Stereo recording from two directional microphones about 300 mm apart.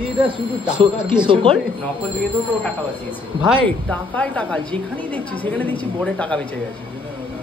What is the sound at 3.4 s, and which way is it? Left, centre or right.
A woman's voice, centre.